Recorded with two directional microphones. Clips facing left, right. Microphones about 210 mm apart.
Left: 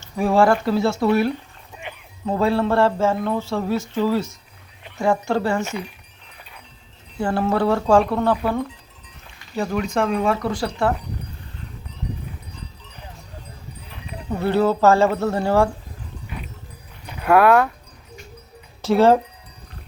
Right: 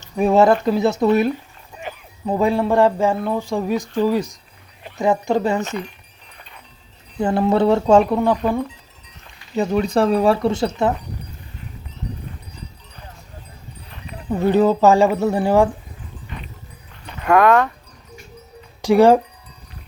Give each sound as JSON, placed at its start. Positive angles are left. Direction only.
{"t": 0.0, "sound": "speech", "side_deg": -20}
{"t": 1.9, "sound": "sheep", "side_deg": -40}
{"t": 2.2, "sound": "speech", "side_deg": -15}
{"t": 7.2, "sound": "speech", "side_deg": -20}
{"t": 9.6, "sound": "speech", "side_deg": -20}
{"t": 9.8, "sound": "speech", "side_deg": -35}
{"t": 13.9, "sound": "livestock", "side_deg": 0}
{"t": 14.3, "sound": "speech", "side_deg": -15}
{"t": 17.1, "sound": "speech", "side_deg": 5}
{"t": 18.8, "sound": "speech", "side_deg": -15}